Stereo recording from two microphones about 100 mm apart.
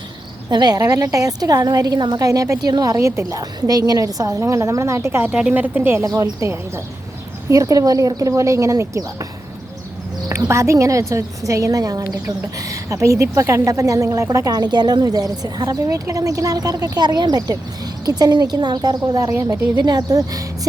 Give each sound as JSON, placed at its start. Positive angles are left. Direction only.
{"t": 0.5, "sound": "a woman's voice", "side_deg": -40}
{"t": 5.3, "sound": "speech", "side_deg": -10}
{"t": 6.0, "sound": "a woman's voice", "side_deg": -35}
{"t": 10.2, "sound": "a woman's voice", "side_deg": -30}